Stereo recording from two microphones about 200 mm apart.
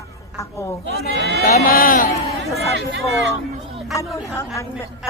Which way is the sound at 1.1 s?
55° right (ahead or behind).